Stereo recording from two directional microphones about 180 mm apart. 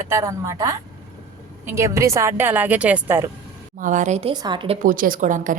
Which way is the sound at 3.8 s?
45° right (ahead or behind).